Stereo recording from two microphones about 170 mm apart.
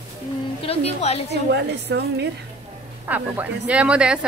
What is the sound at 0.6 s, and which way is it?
Speech, 35° left (ahead or behind).